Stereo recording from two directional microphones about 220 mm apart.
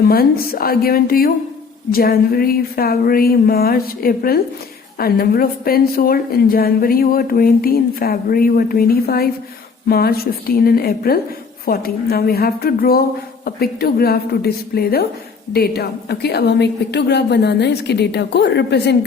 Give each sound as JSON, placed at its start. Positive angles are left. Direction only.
{"t": 0.0, "sound": "a woman's voice", "side_deg": 40}